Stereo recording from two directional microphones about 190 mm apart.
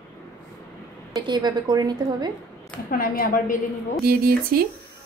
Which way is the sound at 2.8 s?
50° left (ahead or behind).